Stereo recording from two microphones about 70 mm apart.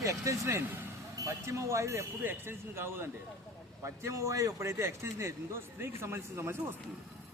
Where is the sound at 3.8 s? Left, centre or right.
Right.